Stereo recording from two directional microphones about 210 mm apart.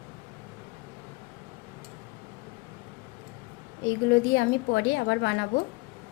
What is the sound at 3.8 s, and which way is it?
A woman's voice, 60° left (ahead or behind).